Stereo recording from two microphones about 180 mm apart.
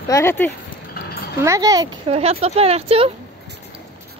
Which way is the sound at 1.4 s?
20° right (ahead or behind).